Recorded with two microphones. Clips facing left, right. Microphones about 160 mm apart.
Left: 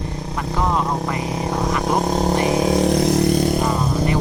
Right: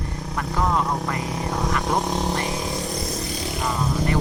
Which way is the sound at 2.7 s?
75° left (ahead or behind).